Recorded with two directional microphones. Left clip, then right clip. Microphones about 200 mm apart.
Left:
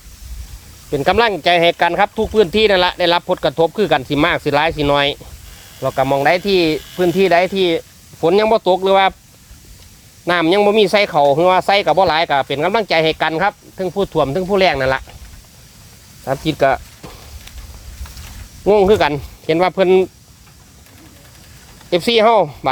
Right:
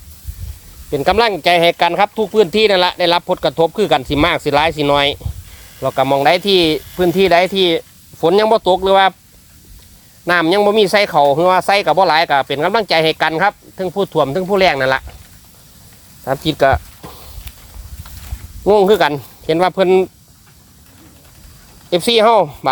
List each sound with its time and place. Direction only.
0.9 s speech: 15° right (ahead or behind)
10.2 s speech: 10° right (ahead or behind)
16.2 s a sound: 20° right (ahead or behind)
18.6 s speech: 20° right (ahead or behind)
21.8 s speech: 20° right (ahead or behind)